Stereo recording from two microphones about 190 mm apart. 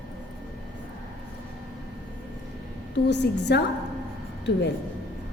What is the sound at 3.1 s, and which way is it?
Speech, 65° left (ahead or behind).